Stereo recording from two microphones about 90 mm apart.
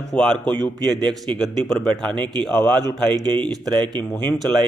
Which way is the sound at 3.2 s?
55° right (ahead or behind).